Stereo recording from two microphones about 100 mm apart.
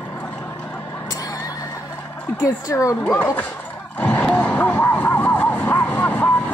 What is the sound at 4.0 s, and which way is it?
Vehicle, 15° left (ahead or behind).